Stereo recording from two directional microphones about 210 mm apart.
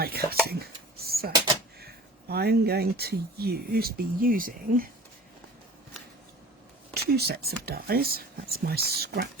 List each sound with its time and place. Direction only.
0.0 s speech: 45° right (ahead or behind)
0.4 s a sound: 50° right (ahead or behind)
1.8 s speech: 50° right (ahead or behind)
6.9 s speech: 50° right (ahead or behind)